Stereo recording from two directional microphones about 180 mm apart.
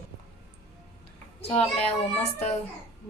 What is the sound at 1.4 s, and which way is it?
A child's voice, 30° left (ahead or behind).